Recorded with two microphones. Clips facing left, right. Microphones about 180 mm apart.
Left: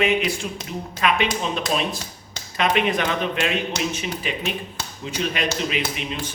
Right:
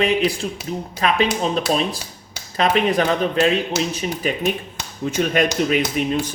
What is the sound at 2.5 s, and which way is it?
A man's voice, 35° right (ahead or behind).